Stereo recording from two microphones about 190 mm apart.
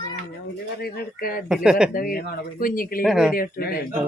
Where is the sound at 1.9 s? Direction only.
50° left (ahead or behind).